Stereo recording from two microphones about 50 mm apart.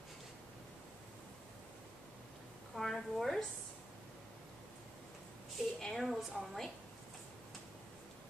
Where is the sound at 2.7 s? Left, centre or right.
Centre.